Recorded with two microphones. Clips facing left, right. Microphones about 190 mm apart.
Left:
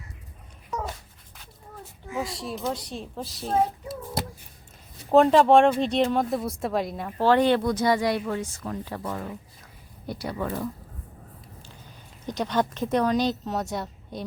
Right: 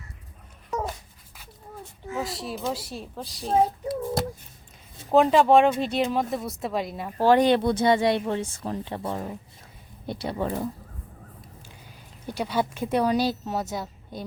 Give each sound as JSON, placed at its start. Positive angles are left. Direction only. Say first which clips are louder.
{"t": 2.1, "sound": "speech", "louder": "even", "side_deg": 0}
{"t": 5.1, "sound": "speech", "louder": "left 1 dB", "side_deg": 0}
{"t": 7.3, "sound": "speech", "louder": "right 1 dB", "side_deg": -15}
{"t": 7.6, "sound": "speech", "louder": "right 2 dB", "side_deg": -25}
{"t": 12.2, "sound": "speech", "louder": "left 1 dB", "side_deg": -10}